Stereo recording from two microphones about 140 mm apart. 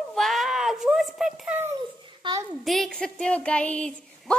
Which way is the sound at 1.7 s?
30° right (ahead or behind).